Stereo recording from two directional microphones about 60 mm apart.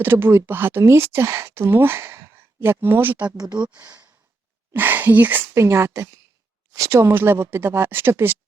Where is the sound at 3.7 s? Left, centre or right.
Right.